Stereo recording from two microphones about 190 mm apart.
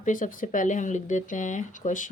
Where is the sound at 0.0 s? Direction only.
45° left (ahead or behind).